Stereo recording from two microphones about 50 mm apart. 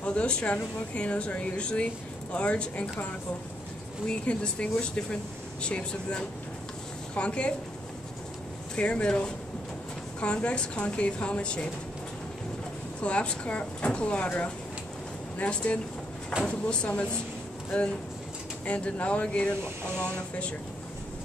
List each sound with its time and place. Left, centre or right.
0.0 s speech: left
4.1 s speech: left
8.7 s speech: left
13.0 s speech: left
18.7 s speech: left